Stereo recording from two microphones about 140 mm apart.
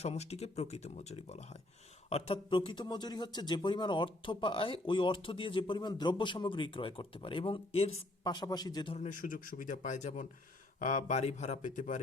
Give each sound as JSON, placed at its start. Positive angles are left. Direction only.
{"t": 0.0, "sound": "a man's voice", "side_deg": 50}
{"t": 8.2, "sound": "a man's voice", "side_deg": 30}
{"t": 9.0, "sound": "speech", "side_deg": 70}